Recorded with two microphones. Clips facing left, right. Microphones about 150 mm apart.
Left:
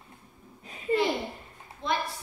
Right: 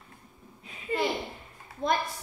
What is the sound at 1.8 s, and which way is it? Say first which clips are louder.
Speech: right 3 dB; 45° right (ahead or behind).